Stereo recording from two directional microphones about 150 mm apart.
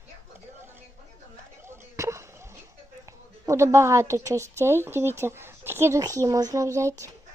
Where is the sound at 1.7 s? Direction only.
20° right (ahead or behind).